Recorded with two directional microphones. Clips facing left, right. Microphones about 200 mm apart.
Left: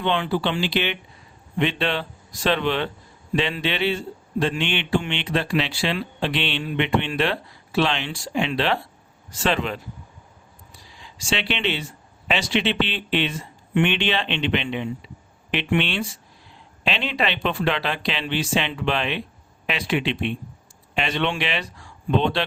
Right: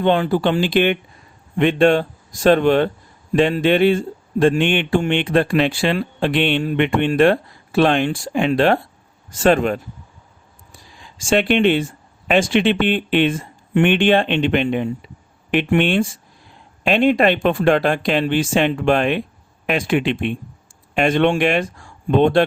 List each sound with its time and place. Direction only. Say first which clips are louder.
0.0 s speech: right 7 dB; 45° right (ahead or behind)
10.7 s a sound: right 3 dB; 50° right (ahead or behind)
12.3 s speech: right 7 dB; 50° right (ahead or behind)